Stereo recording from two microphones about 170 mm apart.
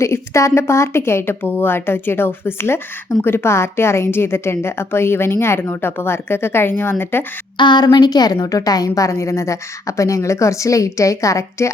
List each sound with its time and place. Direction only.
0.0 s speech: 15° left (ahead or behind)
7.5 s a woman's voice: 25° left (ahead or behind)